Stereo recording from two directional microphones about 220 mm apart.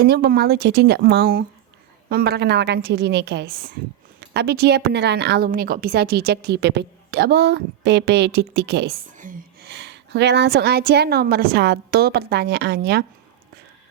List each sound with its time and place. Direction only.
0.0 s a woman's voice: 45° right (ahead or behind)
9.1 s a woman's voice: 35° right (ahead or behind)